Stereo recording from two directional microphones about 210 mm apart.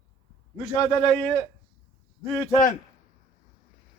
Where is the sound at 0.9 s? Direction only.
5° left (ahead or behind).